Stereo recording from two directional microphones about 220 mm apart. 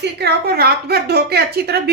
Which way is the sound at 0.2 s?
45° right (ahead or behind).